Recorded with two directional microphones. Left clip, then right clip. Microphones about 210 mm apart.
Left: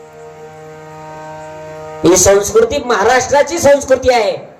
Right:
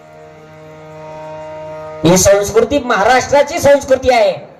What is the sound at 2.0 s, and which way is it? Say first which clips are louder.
A man's voice: left 1 dB; 35° left (ahead or behind).